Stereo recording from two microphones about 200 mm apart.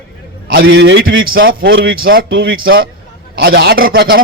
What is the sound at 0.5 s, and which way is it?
Speech, 70° right (ahead or behind).